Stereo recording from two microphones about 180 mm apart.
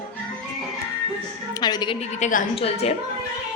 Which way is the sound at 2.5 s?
35° left (ahead or behind).